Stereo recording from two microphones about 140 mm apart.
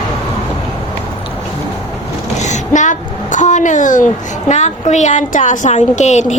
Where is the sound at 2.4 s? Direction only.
60° left (ahead or behind).